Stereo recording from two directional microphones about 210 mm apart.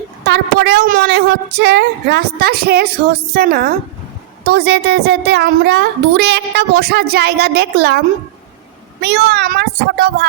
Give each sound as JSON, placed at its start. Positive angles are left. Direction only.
{"t": 0.3, "sound": "a child's voice", "side_deg": -50}